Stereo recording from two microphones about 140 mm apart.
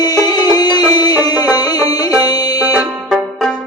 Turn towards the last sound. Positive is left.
turn(degrees=0)  # may be behind; listen again after turning